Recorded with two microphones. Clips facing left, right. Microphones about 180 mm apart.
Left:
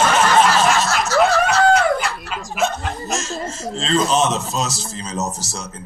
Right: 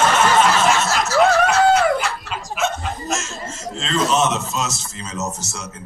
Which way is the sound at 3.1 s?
35° left (ahead or behind).